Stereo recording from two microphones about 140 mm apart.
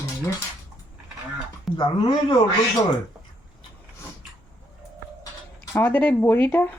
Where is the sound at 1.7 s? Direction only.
30° left (ahead or behind).